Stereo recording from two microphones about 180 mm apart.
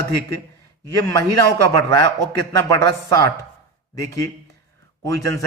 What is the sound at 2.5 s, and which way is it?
Speech, 15° left (ahead or behind).